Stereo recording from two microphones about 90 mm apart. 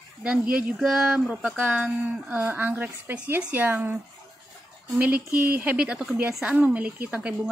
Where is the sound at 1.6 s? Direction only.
20° right (ahead or behind).